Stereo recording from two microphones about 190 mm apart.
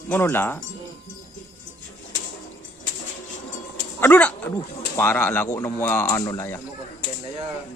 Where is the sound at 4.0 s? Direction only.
10° left (ahead or behind).